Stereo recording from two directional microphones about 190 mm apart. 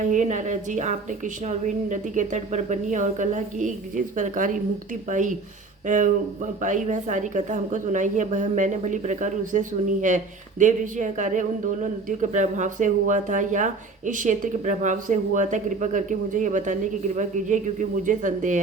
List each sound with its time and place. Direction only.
0.0 s speech: 40° right (ahead or behind)
6.6 s speech: 40° right (ahead or behind)